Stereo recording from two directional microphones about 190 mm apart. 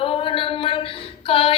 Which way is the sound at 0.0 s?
30° left (ahead or behind).